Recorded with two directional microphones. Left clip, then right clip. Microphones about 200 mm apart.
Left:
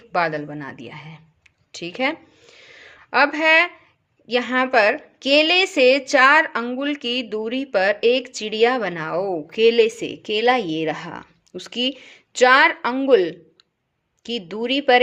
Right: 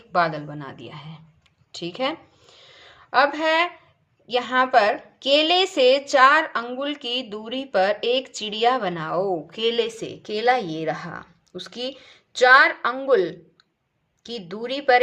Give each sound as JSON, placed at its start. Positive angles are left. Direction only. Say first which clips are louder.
{"t": 0.1, "sound": "speech", "louder": "even", "side_deg": 40}
{"t": 1.7, "sound": "a sound", "louder": "left 3 dB", "side_deg": 40}
{"t": 4.3, "sound": "a woman's voice", "louder": "even", "side_deg": 45}